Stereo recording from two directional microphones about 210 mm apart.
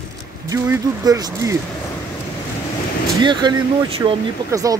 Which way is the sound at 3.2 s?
20° right (ahead or behind).